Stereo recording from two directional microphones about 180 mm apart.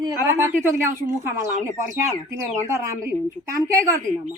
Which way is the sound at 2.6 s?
15° right (ahead or behind).